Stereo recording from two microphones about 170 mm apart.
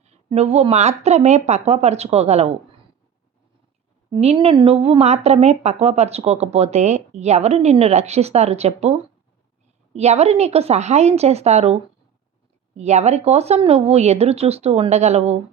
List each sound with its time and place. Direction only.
0.0 s speech: 40° right (ahead or behind)
4.1 s speech: 30° right (ahead or behind)